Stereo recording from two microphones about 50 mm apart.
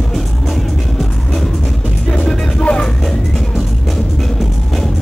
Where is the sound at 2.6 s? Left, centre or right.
Centre.